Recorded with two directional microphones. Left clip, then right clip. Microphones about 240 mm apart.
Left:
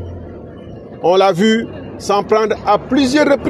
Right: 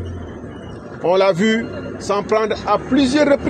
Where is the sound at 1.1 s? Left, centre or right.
Left.